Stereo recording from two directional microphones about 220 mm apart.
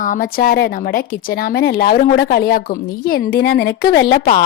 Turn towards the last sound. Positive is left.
turn(degrees=45)  # may be behind; listen again after turning